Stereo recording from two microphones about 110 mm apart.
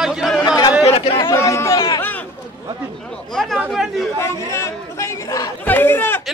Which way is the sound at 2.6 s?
40° right (ahead or behind).